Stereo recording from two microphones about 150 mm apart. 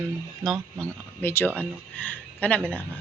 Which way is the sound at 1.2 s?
15° left (ahead or behind).